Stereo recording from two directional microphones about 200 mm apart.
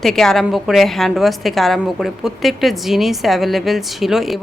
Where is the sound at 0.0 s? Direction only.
Centre (ahead or behind).